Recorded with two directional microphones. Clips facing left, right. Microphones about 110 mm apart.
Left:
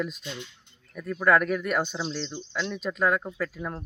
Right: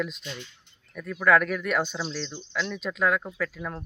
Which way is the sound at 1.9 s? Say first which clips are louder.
Left 1 dB; 25° left (ahead or behind).